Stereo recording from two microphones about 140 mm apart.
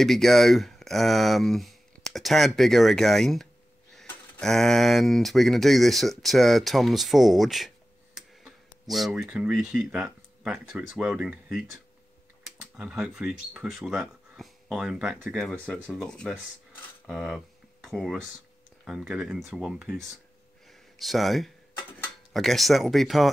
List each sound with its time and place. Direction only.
0.0 s speech: centre (ahead or behind)